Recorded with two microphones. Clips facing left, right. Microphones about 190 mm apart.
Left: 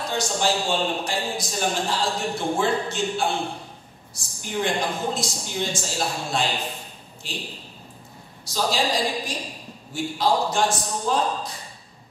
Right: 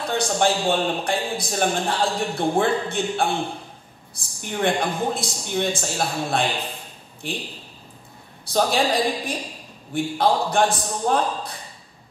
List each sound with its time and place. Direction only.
0.2 s a man's voice: 55° right (ahead or behind)
8.5 s a man's voice: 55° right (ahead or behind)